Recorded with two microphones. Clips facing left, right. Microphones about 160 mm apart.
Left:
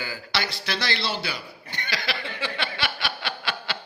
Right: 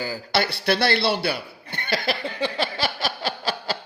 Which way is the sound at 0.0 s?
40° right (ahead or behind).